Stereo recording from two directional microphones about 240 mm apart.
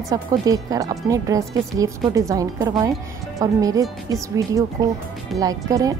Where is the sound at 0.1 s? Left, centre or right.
Centre.